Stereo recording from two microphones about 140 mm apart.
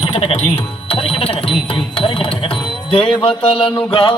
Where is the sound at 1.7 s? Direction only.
40° left (ahead or behind).